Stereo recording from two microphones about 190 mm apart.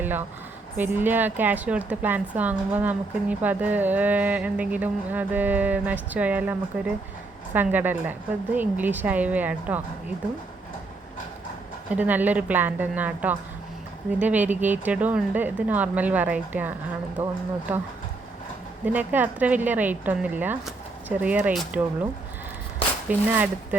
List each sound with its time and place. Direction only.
0.8 s a woman's voice: 10° right (ahead or behind)
11.9 s a woman's voice: 10° right (ahead or behind)
17.2 s speech: 35° right (ahead or behind)
18.9 s a woman's voice: 10° right (ahead or behind)
23.0 s a woman's voice: 10° right (ahead or behind)